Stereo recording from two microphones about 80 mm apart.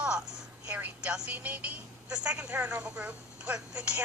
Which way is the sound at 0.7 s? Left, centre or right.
Centre.